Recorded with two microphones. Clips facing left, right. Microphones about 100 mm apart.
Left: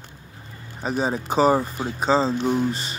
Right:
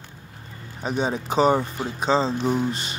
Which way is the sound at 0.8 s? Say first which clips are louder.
Left 1 dB; centre (ahead or behind).